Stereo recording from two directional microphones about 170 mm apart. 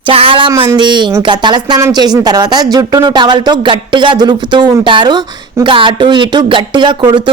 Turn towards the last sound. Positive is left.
turn(degrees=-25)  # may be behind; listen again after turning